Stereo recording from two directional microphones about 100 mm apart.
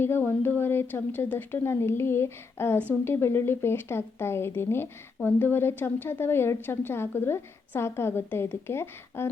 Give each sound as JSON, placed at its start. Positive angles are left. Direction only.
{"t": 0.0, "sound": "speech", "side_deg": 25}